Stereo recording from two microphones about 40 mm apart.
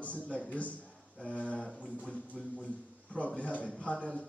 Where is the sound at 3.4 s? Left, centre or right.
Left.